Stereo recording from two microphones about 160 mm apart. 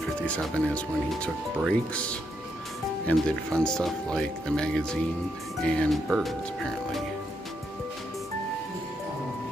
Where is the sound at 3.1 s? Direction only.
5° left (ahead or behind).